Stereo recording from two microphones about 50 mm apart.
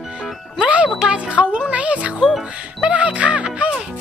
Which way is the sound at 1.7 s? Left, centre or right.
Right.